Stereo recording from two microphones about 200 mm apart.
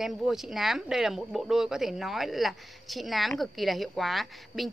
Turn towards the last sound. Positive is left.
turn(degrees=0)  # may be behind; listen again after turning